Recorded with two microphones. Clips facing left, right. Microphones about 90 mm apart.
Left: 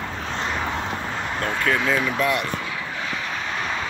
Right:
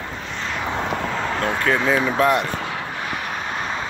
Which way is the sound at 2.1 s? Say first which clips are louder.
Right 4 dB; 35° right (ahead or behind).